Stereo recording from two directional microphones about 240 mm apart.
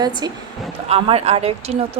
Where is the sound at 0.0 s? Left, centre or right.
Centre.